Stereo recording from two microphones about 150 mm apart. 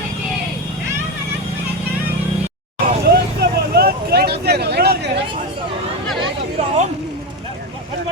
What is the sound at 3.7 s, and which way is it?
Vehicle, 90° right.